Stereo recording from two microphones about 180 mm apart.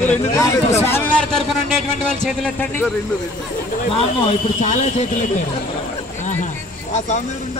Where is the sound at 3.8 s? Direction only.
30° left (ahead or behind).